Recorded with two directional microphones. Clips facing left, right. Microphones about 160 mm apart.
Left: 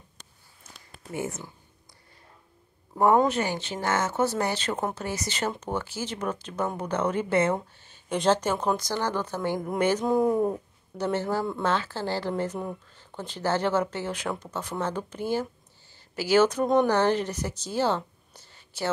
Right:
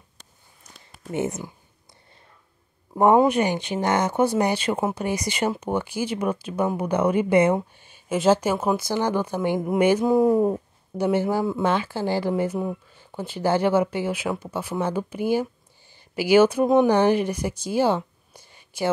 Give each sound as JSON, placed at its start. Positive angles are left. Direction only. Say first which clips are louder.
{"t": 1.1, "sound": "speech", "louder": "right 6 dB", "side_deg": -20}
{"t": 2.9, "sound": "a man's voice", "louder": "right 4 dB", "side_deg": -20}